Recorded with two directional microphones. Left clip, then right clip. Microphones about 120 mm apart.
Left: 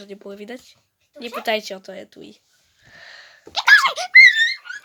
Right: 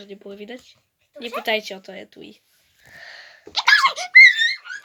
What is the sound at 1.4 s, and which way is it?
Speech, 40° left (ahead or behind).